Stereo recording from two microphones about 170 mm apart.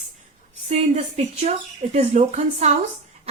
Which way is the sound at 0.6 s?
40° right (ahead or behind).